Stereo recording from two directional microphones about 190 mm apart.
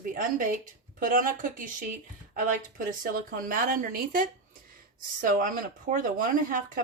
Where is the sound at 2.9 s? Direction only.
50° right (ahead or behind).